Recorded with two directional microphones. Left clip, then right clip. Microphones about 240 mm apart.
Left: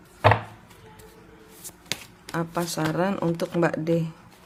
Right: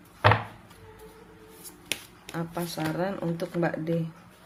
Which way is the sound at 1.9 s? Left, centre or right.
Left.